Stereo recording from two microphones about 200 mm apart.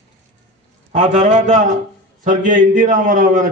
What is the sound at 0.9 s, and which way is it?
A man's voice, 40° right (ahead or behind).